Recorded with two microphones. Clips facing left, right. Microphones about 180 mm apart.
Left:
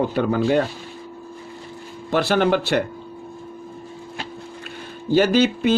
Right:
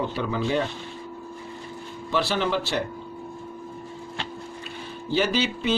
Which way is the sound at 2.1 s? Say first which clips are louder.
Left 6 dB; 50° left (ahead or behind).